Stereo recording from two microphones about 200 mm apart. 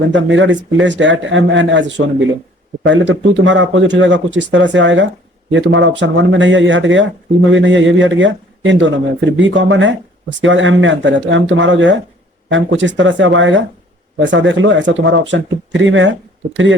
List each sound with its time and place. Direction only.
0.1 s speech: 70° right (ahead or behind)